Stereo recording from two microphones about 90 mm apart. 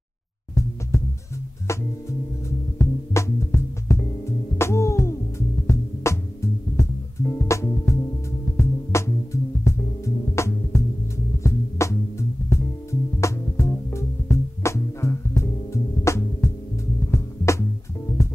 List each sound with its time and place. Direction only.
0.9 s music: 30° left (ahead or behind)